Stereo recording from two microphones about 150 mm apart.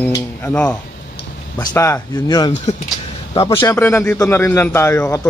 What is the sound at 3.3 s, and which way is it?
Speech, 35° left (ahead or behind).